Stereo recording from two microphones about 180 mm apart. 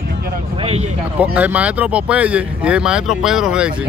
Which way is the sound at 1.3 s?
10° right (ahead or behind).